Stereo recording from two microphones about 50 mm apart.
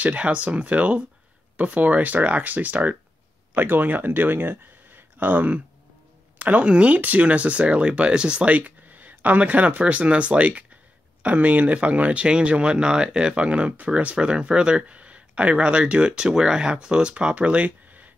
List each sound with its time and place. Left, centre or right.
0.0 s speech: right
3.5 s speech: right